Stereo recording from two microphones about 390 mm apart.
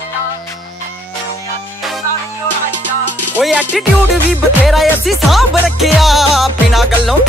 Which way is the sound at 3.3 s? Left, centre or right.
Centre.